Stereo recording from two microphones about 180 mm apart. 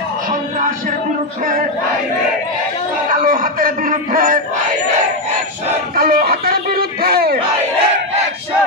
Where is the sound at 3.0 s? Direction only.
50° right (ahead or behind).